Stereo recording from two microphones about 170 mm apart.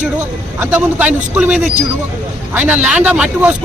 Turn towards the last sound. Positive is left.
turn(degrees=-5)  # may be behind; listen again after turning